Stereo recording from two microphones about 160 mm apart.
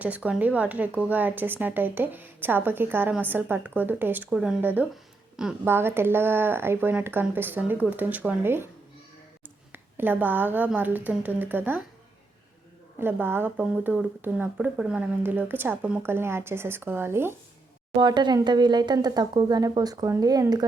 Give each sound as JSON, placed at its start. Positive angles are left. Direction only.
{"t": 0.0, "sound": "speech", "side_deg": -10}
{"t": 9.7, "sound": "speech", "side_deg": -10}
{"t": 13.0, "sound": "speech", "side_deg": -15}
{"t": 18.0, "sound": "speech", "side_deg": -30}